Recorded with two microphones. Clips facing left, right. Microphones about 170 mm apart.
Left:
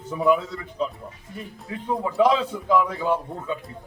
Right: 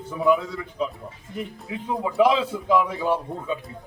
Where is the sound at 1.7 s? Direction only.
15° right (ahead or behind).